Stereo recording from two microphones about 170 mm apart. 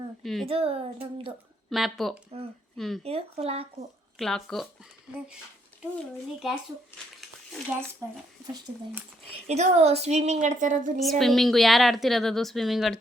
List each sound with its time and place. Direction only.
0.2 s a sound: centre (ahead or behind)
0.4 s a woman's voice: 35° right (ahead or behind)
1.7 s a woman's voice: centre (ahead or behind)
3.0 s a woman's voice: 35° right (ahead or behind)
4.2 s a woman's voice: 5° left (ahead or behind)
9.5 s a woman's voice: 40° right (ahead or behind)
11.2 s a woman's voice: centre (ahead or behind)